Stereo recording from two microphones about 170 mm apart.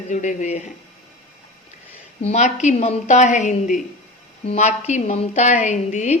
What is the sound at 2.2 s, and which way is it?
A woman's voice, 40° left (ahead or behind).